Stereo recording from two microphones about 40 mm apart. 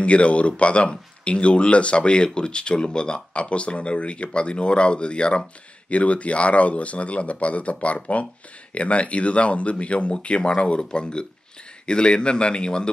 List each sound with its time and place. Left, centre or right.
0.0 s speech: left